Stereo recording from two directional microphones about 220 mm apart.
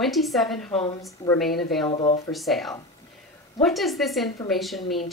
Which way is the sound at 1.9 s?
25° left (ahead or behind).